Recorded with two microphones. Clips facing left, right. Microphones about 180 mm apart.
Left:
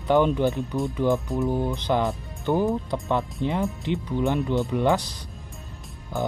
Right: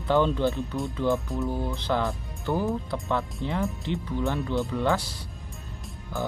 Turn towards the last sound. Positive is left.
turn(degrees=15)  # may be behind; listen again after turning